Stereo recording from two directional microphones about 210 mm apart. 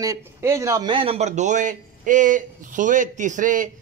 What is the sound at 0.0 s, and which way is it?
A man's voice, 15° right (ahead or behind).